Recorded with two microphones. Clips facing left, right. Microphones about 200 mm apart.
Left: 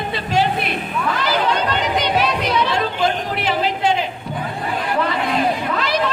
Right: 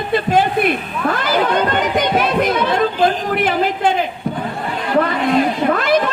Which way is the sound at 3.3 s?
50° right (ahead or behind).